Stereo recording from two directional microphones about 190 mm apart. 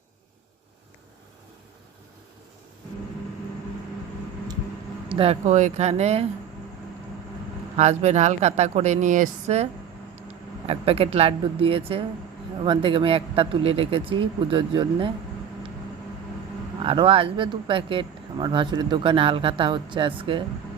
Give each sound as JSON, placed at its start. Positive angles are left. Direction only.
{"t": 5.0, "sound": "speech", "side_deg": -30}
{"t": 7.8, "sound": "speech", "side_deg": -35}
{"t": 10.7, "sound": "speech", "side_deg": -30}
{"t": 16.8, "sound": "speech", "side_deg": -25}